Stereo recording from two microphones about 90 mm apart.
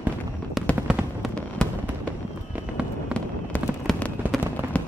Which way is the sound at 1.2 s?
Centre (ahead or behind).